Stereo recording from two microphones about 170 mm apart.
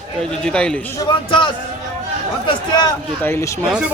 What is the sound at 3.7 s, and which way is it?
Speech, 5° right (ahead or behind).